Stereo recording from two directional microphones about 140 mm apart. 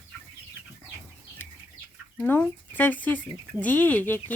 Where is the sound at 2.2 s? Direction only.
10° left (ahead or behind).